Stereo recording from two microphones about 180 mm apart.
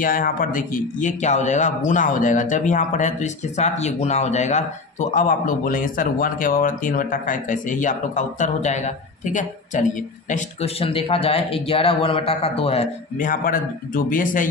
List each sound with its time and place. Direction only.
0.0 s speech: 50° left (ahead or behind)
10.3 s a man's voice: 35° left (ahead or behind)
13.2 s speech: 50° left (ahead or behind)